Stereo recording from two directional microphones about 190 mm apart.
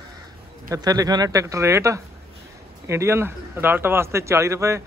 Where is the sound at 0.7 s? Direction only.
20° right (ahead or behind).